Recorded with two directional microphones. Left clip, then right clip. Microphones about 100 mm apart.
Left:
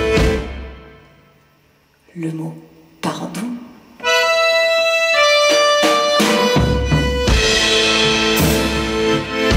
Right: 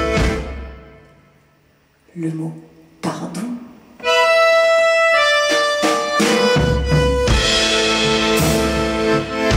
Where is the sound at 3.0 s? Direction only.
15° left (ahead or behind).